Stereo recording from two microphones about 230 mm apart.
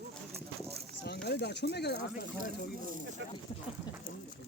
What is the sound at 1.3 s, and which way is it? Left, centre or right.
Speech, left.